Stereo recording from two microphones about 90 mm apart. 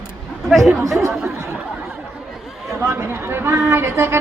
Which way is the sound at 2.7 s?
30° right (ahead or behind).